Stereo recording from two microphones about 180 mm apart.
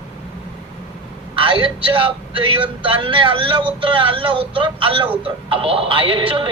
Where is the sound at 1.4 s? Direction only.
30° right (ahead or behind).